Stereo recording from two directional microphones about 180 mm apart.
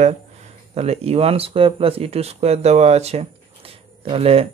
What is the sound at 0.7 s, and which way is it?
Speech, 35° right (ahead or behind).